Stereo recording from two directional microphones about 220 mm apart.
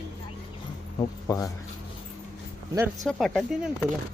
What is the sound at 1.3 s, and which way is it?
Speech, 15° left (ahead or behind).